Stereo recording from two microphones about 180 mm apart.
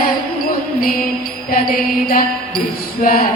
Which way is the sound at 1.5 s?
50° left (ahead or behind).